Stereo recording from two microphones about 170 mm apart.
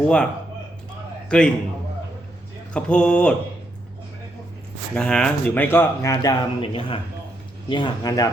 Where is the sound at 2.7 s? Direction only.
5° left (ahead or behind).